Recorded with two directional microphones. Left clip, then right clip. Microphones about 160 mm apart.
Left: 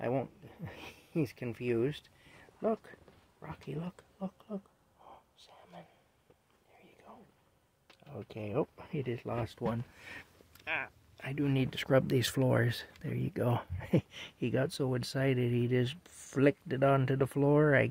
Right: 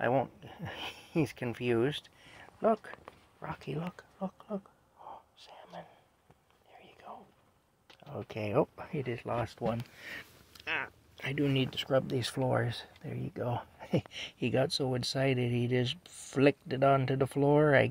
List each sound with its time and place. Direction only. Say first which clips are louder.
0.0 s speech: right 5 dB; 15° left (ahead or behind)
0.4 s a sound: right 7 dB; 5° left (ahead or behind)
3.3 s speech: right 4 dB; 5° left (ahead or behind)
5.0 s whispering: right 7 dB; 5° left (ahead or behind)
8.1 s speech: right 5 dB; centre (ahead or behind)
8.7 s speech: right 2 dB; 15° left (ahead or behind)
9.0 s speech: right 3 dB; 30° left (ahead or behind)
10.6 s a sound: right 1 dB; 10° left (ahead or behind)
11.4 s speech: right 2 dB; 30° left (ahead or behind)
11.7 s speech: left 1 dB; 50° left (ahead or behind)
13.7 s speech: left 1 dB; 30° left (ahead or behind)
14.1 s speech: right 3 dB; 15° left (ahead or behind)
14.7 s speech: right 3 dB; 20° left (ahead or behind)